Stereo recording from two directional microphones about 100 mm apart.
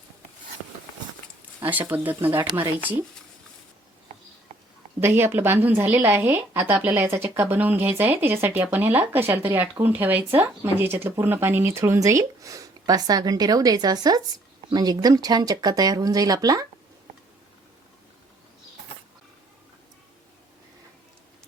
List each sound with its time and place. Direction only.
1.5 s a woman's voice: 20° right (ahead or behind)
4.9 s a woman's voice: 20° right (ahead or behind); by 16.6 s 40° right (ahead or behind)